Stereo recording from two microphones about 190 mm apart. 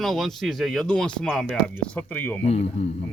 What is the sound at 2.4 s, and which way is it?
Speech, 35° left (ahead or behind).